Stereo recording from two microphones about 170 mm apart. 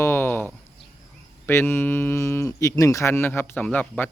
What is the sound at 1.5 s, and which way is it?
Speech, 15° left (ahead or behind).